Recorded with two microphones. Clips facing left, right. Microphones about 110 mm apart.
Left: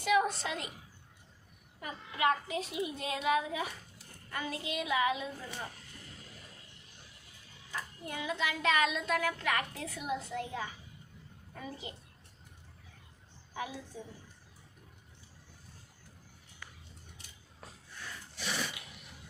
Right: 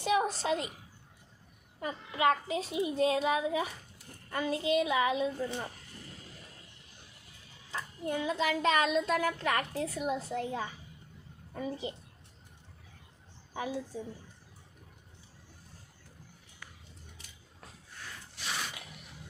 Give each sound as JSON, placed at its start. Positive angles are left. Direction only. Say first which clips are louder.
{"t": 0.0, "sound": "a child's voice", "louder": "even", "side_deg": -30}
{"t": 1.8, "sound": "a woman's voice", "louder": "right 3 dB", "side_deg": -30}
{"t": 7.7, "sound": "speech", "louder": "right 6 dB", "side_deg": -30}
{"t": 13.9, "sound": "speech", "louder": "right 6 dB", "side_deg": -30}